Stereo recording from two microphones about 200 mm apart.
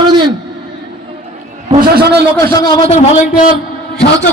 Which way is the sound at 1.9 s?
55° right (ahead or behind).